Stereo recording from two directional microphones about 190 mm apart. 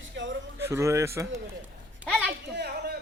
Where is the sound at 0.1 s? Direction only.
75° right (ahead or behind).